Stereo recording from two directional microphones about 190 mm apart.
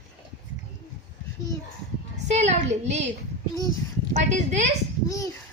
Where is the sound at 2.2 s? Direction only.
35° right (ahead or behind).